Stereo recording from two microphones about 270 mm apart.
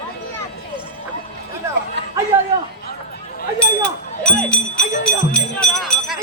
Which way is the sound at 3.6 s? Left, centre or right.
Centre.